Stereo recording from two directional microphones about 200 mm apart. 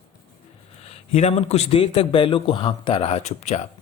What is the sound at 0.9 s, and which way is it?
A man's voice, 30° left (ahead or behind).